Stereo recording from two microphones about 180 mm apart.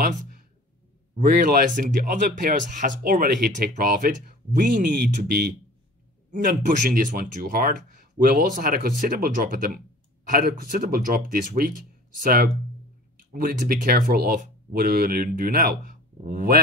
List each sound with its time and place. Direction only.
1.1 s speech: 50° right (ahead or behind)